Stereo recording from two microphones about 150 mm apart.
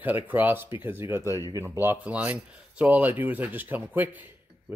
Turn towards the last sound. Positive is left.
turn(degrees=-10)  # may be behind; listen again after turning